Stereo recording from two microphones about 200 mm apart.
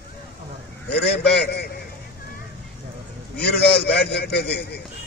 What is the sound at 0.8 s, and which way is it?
Speech, 55° left (ahead or behind).